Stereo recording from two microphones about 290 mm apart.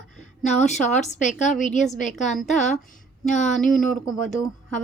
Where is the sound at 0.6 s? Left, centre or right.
Left.